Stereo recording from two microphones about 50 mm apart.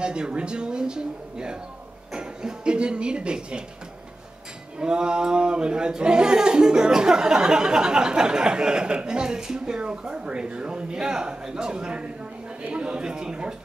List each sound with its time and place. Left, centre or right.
0.0 s speech: centre
4.7 s speech: centre